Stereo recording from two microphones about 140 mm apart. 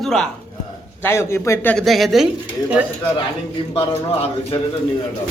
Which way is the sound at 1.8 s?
Centre (ahead or behind).